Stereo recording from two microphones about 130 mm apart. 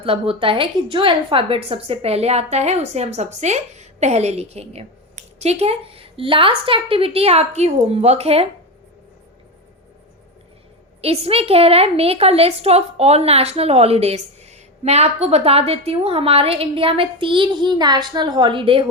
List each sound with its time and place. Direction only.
0.0 s a woman's voice: 45° right (ahead or behind)
11.0 s a woman's voice: 50° right (ahead or behind)